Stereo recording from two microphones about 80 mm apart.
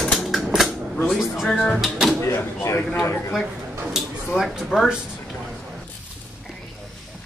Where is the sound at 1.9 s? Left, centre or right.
Centre.